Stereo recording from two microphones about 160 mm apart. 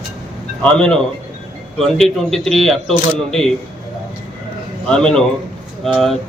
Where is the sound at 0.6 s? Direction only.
5° left (ahead or behind).